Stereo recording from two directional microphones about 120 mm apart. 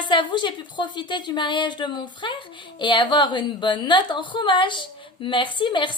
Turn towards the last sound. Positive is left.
turn(degrees=40)  # may be behind; listen again after turning